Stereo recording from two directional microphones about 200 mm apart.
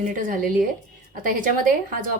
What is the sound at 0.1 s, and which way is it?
A woman's voice, 40° right (ahead or behind).